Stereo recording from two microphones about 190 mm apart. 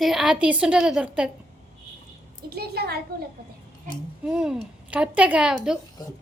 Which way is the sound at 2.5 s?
55° right (ahead or behind).